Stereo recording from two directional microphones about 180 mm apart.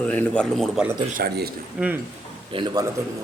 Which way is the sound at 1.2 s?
60° right (ahead or behind).